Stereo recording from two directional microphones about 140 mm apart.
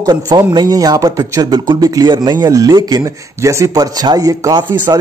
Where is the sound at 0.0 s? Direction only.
30° right (ahead or behind).